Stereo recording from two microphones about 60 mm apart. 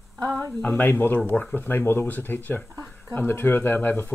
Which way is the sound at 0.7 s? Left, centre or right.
Left.